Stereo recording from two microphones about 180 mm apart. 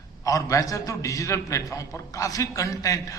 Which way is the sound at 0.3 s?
20° left (ahead or behind).